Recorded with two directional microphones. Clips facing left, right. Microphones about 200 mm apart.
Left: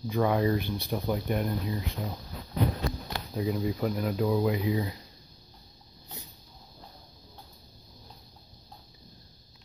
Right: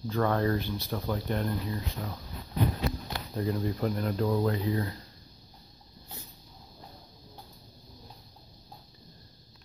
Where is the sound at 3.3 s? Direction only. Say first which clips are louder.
Left 1 dB; 5° left (ahead or behind).